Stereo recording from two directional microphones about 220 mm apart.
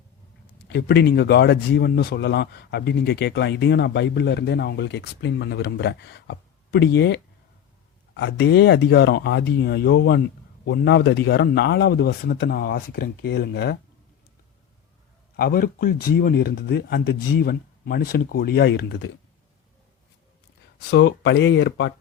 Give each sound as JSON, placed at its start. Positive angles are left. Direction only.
{"t": 0.7, "sound": "speech", "side_deg": 50}
{"t": 15.4, "sound": "speech", "side_deg": 45}
{"t": 20.9, "sound": "speech", "side_deg": 55}